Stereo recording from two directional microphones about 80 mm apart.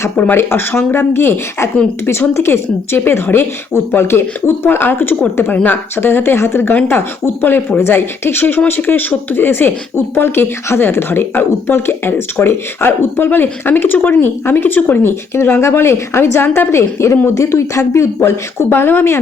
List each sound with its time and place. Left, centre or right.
0.2 s speech: left